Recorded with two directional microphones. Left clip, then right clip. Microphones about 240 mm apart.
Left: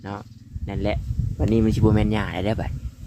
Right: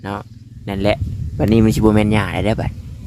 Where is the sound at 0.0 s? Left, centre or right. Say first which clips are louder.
Right 8 dB; centre.